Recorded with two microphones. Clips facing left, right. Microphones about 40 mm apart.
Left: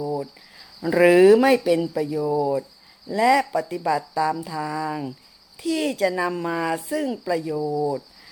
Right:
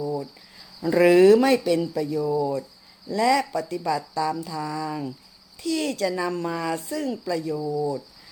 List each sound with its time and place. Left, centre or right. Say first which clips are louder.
0.0 s cricket: left 1 dB; centre
0.8 s speech: left 1 dB; centre